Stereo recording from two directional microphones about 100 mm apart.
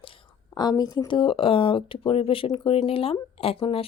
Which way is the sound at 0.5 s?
40° left (ahead or behind).